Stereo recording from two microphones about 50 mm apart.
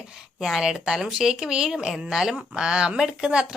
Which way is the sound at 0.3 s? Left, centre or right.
Centre.